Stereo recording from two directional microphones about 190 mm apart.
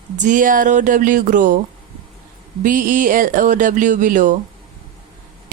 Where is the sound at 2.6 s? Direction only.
45° right (ahead or behind).